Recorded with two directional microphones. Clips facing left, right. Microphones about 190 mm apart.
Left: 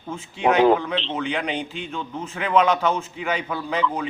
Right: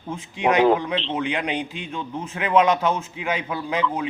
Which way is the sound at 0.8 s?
15° right (ahead or behind).